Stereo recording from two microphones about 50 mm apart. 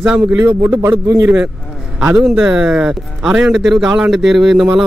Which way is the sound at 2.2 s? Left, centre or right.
Centre.